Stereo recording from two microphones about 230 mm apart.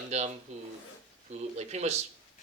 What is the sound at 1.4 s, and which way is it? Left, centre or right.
Speech, right.